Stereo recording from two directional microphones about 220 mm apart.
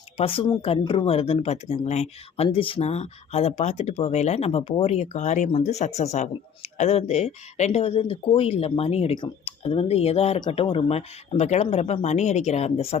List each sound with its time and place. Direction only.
0.2 s speech: 25° left (ahead or behind)